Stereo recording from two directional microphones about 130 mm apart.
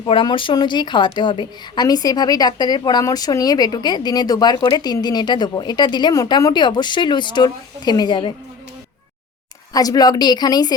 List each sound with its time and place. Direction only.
0.0 s a woman's voice: 40° left (ahead or behind)
9.7 s a woman's voice: 30° left (ahead or behind)